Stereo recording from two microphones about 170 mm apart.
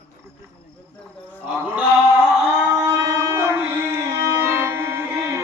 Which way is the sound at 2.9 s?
20° right (ahead or behind).